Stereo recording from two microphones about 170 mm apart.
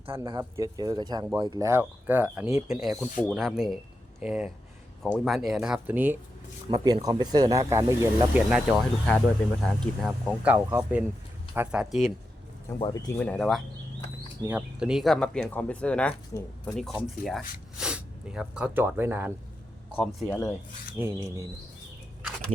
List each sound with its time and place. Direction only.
0.3 s speech: 20° right (ahead or behind); by 2.9 s 5° right (ahead or behind)
3.0 s speech: 10° left (ahead or behind); by 6.1 s 10° right (ahead or behind)
6.7 s speech: 25° right (ahead or behind)
8.3 s speech: 5° right (ahead or behind)
10.4 s speech: 10° right (ahead or behind)
12.8 s speech: 20° left (ahead or behind)
13.1 s speech: 5° left (ahead or behind); by 19.3 s 10° right (ahead or behind)
20.3 s speech: 15° left (ahead or behind)
21.0 s speech: 20° right (ahead or behind)